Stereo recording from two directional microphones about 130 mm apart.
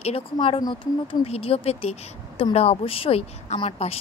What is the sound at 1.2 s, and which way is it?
A woman's voice, 50° left (ahead or behind).